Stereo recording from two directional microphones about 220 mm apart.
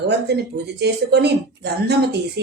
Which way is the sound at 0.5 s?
50° right (ahead or behind).